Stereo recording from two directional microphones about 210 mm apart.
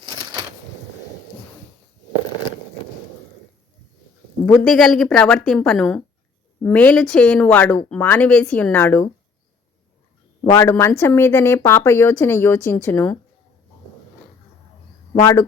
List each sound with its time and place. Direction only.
4.4 s a woman's voice: 5° left (ahead or behind)
10.4 s speech: 15° left (ahead or behind)
15.1 s speech: 15° left (ahead or behind)